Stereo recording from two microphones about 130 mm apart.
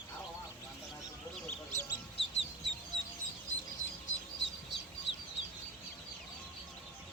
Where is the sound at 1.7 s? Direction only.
65° left (ahead or behind).